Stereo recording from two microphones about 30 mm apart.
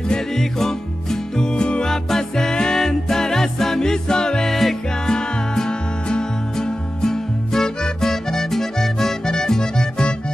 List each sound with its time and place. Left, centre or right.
0.3 s music: centre
1.5 s music: left
2.3 s music: left
4.5 s music: centre
5.0 s music: left